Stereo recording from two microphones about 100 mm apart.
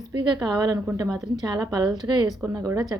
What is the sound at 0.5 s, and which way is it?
A woman's voice, 40° right (ahead or behind).